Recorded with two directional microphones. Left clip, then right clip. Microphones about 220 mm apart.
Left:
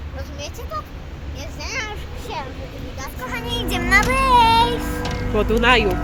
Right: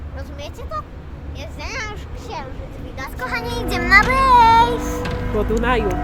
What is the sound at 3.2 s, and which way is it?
Speech, centre (ahead or behind).